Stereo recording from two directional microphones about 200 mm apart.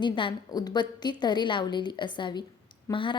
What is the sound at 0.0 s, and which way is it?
A woman's voice, 25° left (ahead or behind).